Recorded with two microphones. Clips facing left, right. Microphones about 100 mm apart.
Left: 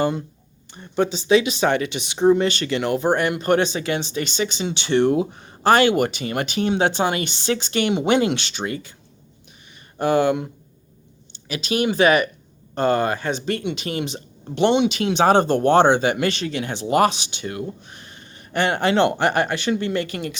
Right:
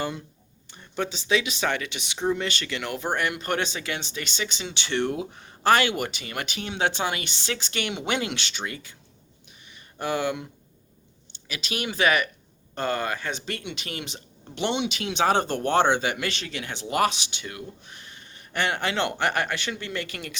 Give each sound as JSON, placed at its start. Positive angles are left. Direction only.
{"t": 0.7, "sound": "speech", "side_deg": 35}
{"t": 11.4, "sound": "speech", "side_deg": 35}